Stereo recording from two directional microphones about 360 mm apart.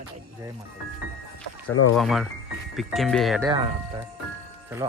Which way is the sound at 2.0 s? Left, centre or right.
Centre.